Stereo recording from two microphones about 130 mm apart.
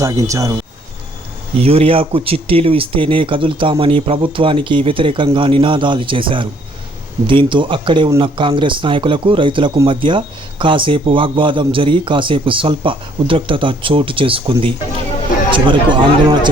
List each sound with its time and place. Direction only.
0.0 s speech: 25° right (ahead or behind)
1.5 s speech: 50° right (ahead or behind)